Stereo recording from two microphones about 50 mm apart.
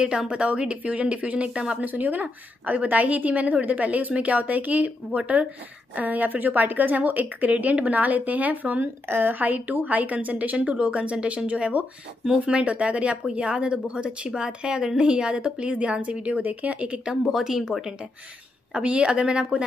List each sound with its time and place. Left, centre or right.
0.0 s speech: centre
1.9 s a woman's voice: right
7.5 s a woman's voice: right
8.8 s speech: right
17.2 s speech: centre
18.7 s speech: right